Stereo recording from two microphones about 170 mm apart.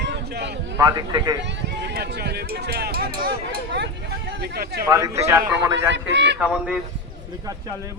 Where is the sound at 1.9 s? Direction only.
70° right (ahead or behind).